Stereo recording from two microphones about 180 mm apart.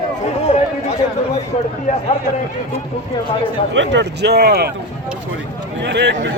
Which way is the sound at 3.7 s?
85° right.